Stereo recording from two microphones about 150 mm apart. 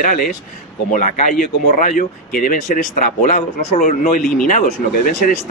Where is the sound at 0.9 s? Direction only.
60° left (ahead or behind).